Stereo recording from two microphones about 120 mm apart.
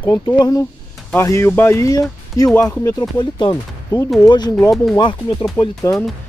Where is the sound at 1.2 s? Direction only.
20° left (ahead or behind); by 4.5 s 40° left (ahead or behind).